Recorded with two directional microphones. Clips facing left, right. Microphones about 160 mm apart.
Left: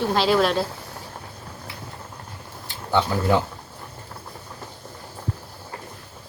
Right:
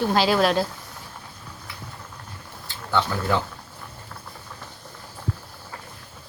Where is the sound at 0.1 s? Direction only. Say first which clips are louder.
Left 1 dB; centre (ahead or behind).